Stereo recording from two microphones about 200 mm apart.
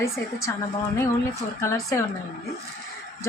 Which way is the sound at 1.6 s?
15° left (ahead or behind).